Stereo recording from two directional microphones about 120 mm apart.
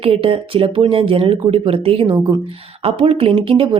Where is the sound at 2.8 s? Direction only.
55° right (ahead or behind).